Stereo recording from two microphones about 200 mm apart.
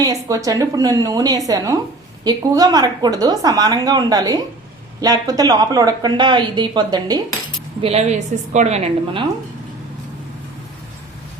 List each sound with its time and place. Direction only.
0.0 s a woman's voice: 15° right (ahead or behind); by 9.2 s 35° right (ahead or behind)